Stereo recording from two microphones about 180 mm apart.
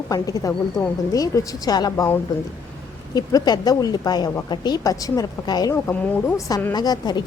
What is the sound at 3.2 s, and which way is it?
A woman's voice, 20° left (ahead or behind).